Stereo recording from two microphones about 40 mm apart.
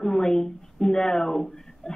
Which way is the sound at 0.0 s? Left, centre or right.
Centre.